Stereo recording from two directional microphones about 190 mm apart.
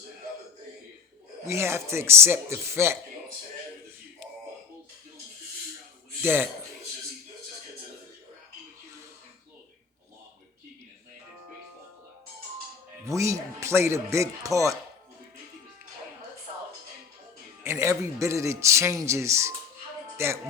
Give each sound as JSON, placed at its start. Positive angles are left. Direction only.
{"t": 1.5, "sound": "speech", "side_deg": -15}
{"t": 6.2, "sound": "speech", "side_deg": -10}
{"t": 13.1, "sound": "speech", "side_deg": -15}
{"t": 17.6, "sound": "speech", "side_deg": -15}